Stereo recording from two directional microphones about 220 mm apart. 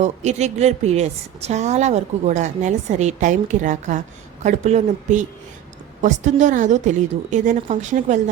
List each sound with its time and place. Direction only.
0.0 s a woman's voice: 30° right (ahead or behind)